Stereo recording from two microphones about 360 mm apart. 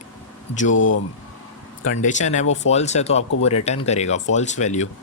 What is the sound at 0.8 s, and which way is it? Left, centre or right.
Speech, left.